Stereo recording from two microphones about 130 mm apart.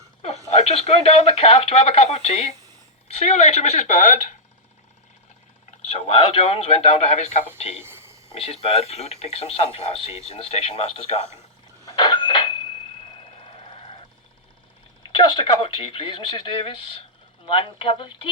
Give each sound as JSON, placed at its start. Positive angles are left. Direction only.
{"t": 0.4, "sound": "speech", "side_deg": 55}
{"t": 5.7, "sound": "speech", "side_deg": 50}
{"t": 7.8, "sound": "a sound", "side_deg": -15}
{"t": 8.3, "sound": "speech", "side_deg": 50}
{"t": 11.9, "sound": "a sound", "side_deg": 35}
{"t": 15.1, "sound": "speech", "side_deg": 35}